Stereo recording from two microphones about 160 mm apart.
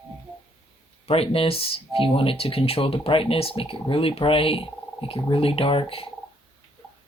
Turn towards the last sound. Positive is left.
turn(degrees=35)  # may be behind; listen again after turning